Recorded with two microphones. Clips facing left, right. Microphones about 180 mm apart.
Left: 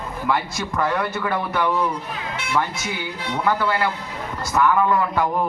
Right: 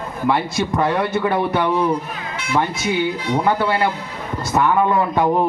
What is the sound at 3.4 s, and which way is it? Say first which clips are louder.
A man's voice: right 2 dB; 25° right (ahead or behind).